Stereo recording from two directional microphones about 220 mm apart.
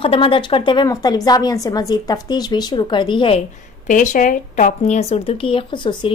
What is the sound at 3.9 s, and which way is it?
Speech, 35° left (ahead or behind).